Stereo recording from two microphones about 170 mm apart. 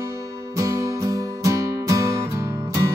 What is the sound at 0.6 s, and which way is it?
Music, 20° right (ahead or behind).